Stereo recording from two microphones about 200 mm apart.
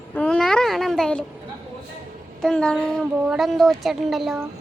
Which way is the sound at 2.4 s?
5° left (ahead or behind).